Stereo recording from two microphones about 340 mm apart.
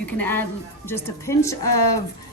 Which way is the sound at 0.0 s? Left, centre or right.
Centre.